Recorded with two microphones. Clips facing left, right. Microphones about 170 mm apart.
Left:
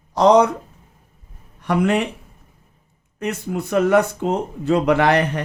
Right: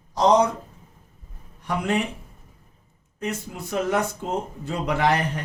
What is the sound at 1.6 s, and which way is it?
Speech, 70° left (ahead or behind).